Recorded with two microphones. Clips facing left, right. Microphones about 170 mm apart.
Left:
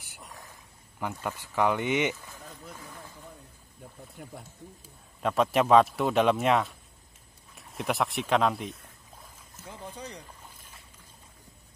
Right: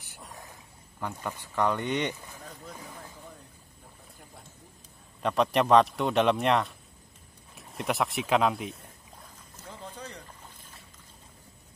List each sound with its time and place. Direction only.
0.9 s speech: 5° left (ahead or behind)
4.2 s speech: 70° left (ahead or behind)
5.2 s speech: centre (ahead or behind)
9.7 s a sound: 15° left (ahead or behind)